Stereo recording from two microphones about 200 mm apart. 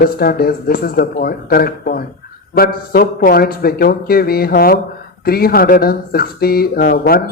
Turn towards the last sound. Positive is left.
turn(degrees=50)  # may be behind; listen again after turning